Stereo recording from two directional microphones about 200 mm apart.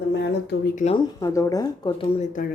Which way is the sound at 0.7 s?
35° left (ahead or behind).